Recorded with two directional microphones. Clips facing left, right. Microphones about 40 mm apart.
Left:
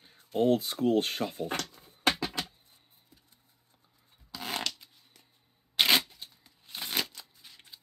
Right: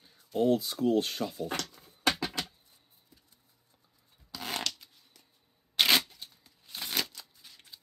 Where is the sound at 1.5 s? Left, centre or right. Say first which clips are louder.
Left 1 dB; centre.